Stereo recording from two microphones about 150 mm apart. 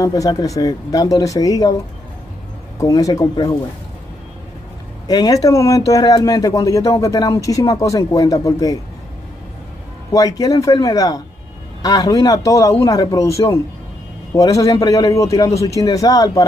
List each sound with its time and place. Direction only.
0.0 s speech: 25° left (ahead or behind)
2.8 s speech: 25° left (ahead or behind)
5.0 s speech: 25° left (ahead or behind)
10.1 s speech: 25° left (ahead or behind)